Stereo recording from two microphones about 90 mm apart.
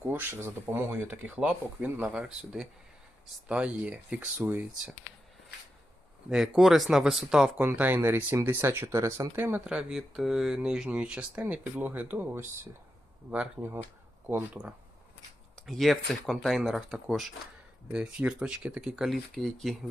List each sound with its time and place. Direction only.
0.1 s speech: 25° right (ahead or behind)
6.3 s speech: 5° right (ahead or behind)
7.6 s speech: 20° right (ahead or behind)
14.3 s speech: 20° right (ahead or behind)
15.5 s speech: centre (ahead or behind)